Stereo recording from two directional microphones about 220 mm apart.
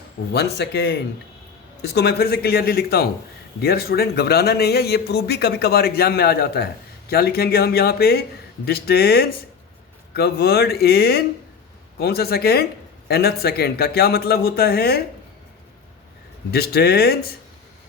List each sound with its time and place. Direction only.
0.3 s a man's voice: 50° left (ahead or behind)
16.5 s a man's voice: 45° left (ahead or behind)